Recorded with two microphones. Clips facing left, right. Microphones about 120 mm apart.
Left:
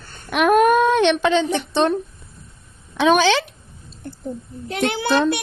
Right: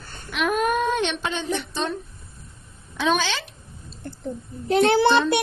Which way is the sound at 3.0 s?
75° left (ahead or behind).